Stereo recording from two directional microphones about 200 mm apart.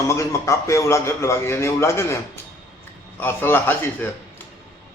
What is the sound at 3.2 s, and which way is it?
Speech, 10° left (ahead or behind).